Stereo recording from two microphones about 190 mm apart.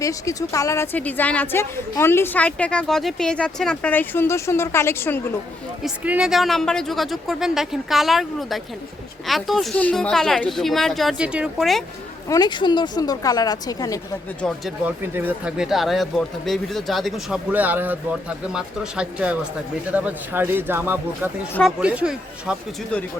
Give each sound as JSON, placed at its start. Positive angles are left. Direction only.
{"t": 0.0, "sound": "a woman's voice", "side_deg": 15}
{"t": 5.8, "sound": "speech", "side_deg": -5}
{"t": 12.3, "sound": "a woman's voice", "side_deg": 25}
{"t": 14.4, "sound": "speech", "side_deg": 0}